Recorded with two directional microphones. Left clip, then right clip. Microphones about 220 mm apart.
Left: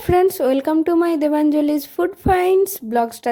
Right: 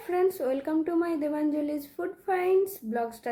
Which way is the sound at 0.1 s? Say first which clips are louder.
Left 11 dB; 45° left (ahead or behind).